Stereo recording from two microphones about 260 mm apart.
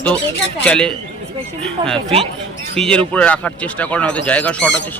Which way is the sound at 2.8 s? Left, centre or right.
Centre.